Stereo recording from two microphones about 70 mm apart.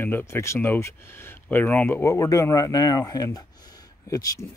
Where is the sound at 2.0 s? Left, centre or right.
Left.